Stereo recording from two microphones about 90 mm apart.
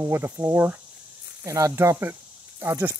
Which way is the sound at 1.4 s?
35° right (ahead or behind).